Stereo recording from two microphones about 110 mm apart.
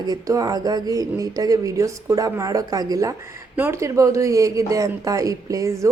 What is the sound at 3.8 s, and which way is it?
Speech, 30° right (ahead or behind).